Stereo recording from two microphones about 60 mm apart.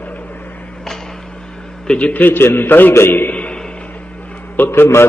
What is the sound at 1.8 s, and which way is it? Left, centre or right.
A man's voice, left.